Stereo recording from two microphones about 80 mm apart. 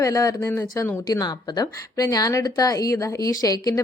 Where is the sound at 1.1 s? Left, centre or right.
Left.